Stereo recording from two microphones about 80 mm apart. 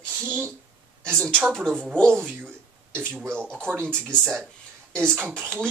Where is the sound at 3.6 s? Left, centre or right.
Right.